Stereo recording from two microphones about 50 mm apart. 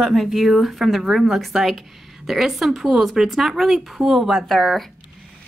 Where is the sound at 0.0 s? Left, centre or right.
Centre.